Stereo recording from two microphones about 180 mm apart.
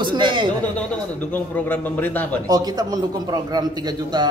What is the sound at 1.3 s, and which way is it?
A man's voice, 10° left (ahead or behind).